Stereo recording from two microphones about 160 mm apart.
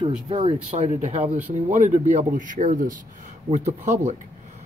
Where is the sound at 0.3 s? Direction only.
35° right (ahead or behind).